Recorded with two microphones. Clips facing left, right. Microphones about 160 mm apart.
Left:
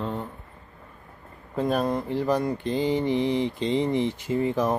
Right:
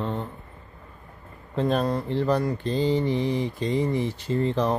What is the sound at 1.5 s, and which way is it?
Mantra, 10° left (ahead or behind).